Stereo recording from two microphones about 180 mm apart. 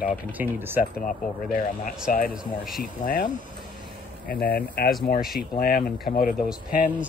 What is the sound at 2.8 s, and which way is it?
Speech, 50° left (ahead or behind).